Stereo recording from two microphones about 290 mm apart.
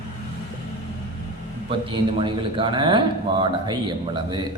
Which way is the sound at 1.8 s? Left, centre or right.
Centre.